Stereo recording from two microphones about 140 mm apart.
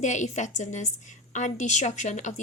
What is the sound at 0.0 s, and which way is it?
A woman's voice, 60° left (ahead or behind).